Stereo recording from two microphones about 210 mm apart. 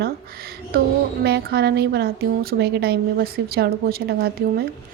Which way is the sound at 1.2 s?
50° right (ahead or behind).